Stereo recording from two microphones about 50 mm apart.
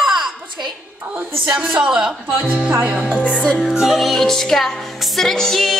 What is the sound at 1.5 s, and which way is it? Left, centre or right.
Speech, centre.